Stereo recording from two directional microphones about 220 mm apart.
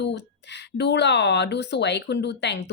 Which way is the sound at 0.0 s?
50° left (ahead or behind).